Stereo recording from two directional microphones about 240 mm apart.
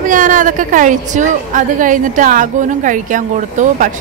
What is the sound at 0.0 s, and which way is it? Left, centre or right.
A woman's voice, right.